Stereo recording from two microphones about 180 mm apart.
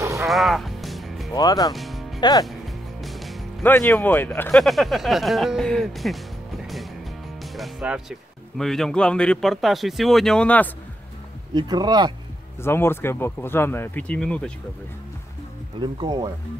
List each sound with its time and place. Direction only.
0.0 s music: 15° right (ahead or behind)
0.3 s music: centre (ahead or behind)
1.3 s speech: 20° left (ahead or behind)
1.7 s music: centre (ahead or behind)
2.1 s speech: 25° left (ahead or behind)
2.4 s music: centre (ahead or behind)
3.6 s speech: 10° left (ahead or behind)
11.5 s speech: 20° right (ahead or behind)
12.6 s speech: 15° left (ahead or behind)
15.8 s speech: 25° right (ahead or behind)